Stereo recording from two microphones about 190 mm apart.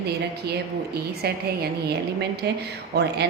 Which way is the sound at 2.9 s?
60° right (ahead or behind).